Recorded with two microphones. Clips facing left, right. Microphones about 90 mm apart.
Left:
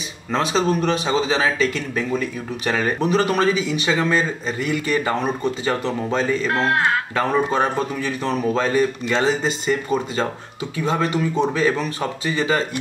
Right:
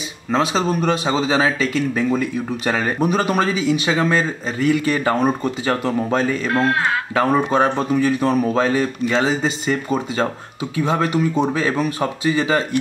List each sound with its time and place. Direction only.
0.3 s speech: 5° right (ahead or behind)
6.4 s speech: centre (ahead or behind)
7.2 s speech: 10° right (ahead or behind)
10.8 s speech: 15° right (ahead or behind)